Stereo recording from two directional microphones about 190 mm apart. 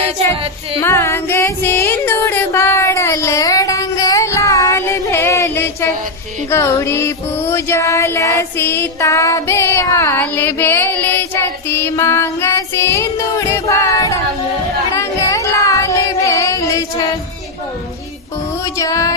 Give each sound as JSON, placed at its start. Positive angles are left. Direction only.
{"t": 0.8, "sound": "female singing", "side_deg": 15}
{"t": 6.5, "sound": "music", "side_deg": 15}
{"t": 14.9, "sound": "child singing", "side_deg": 15}
{"t": 18.6, "sound": "music", "side_deg": 15}